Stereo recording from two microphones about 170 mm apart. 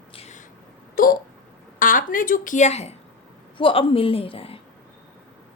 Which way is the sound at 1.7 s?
55° left (ahead or behind).